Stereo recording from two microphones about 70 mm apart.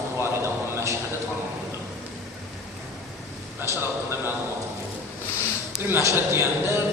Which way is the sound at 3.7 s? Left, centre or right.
Right.